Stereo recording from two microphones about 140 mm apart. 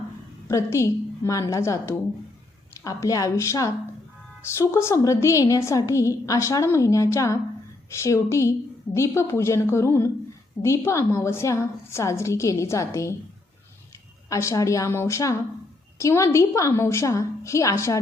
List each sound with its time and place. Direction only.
0.4 s a woman's voice: 20° left (ahead or behind)
14.3 s a woman's voice: 20° left (ahead or behind)